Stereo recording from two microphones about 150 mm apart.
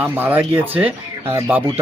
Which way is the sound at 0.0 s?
15° right (ahead or behind).